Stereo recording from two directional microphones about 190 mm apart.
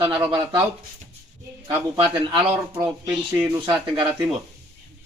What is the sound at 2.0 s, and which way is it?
Speech, 25° right (ahead or behind).